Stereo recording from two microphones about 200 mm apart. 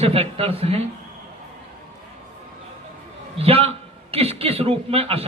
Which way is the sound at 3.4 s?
30° right (ahead or behind).